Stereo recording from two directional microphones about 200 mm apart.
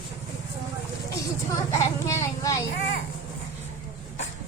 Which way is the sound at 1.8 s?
15° left (ahead or behind).